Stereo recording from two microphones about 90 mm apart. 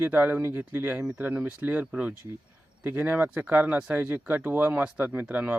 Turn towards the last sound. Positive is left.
turn(degrees=-15)  # may be behind; listen again after turning